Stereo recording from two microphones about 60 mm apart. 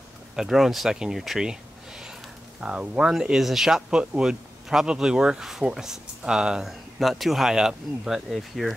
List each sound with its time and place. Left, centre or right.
0.4 s speech: centre
8.3 s speech: centre